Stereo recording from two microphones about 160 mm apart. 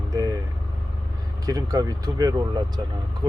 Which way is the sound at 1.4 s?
25° right (ahead or behind).